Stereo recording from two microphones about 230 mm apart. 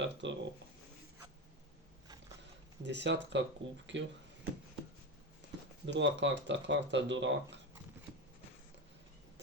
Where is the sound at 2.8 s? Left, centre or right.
Right.